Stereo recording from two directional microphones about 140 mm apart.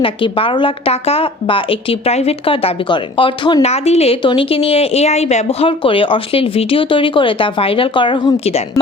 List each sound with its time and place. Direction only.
0.0 s a woman's voice: 40° left (ahead or behind)
3.6 s a woman's voice: 50° left (ahead or behind)